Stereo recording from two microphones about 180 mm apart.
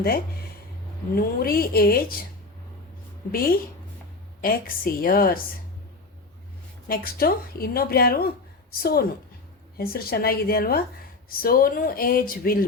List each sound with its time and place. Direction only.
1.1 s speech: 55° left (ahead or behind)
3.3 s speech: 55° left (ahead or behind)
6.8 s speech: 55° left (ahead or behind)